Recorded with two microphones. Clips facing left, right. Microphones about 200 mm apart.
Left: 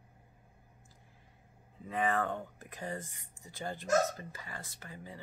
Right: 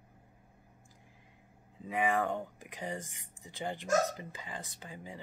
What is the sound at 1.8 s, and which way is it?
Speech, 10° right (ahead or behind).